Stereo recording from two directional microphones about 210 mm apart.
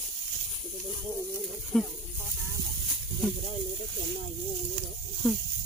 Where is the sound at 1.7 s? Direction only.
5° left (ahead or behind).